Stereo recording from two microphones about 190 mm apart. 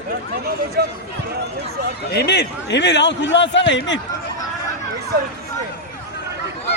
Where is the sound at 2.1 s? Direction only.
60° left (ahead or behind).